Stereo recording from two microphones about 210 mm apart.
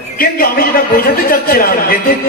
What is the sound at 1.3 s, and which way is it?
Speech, 45° left (ahead or behind).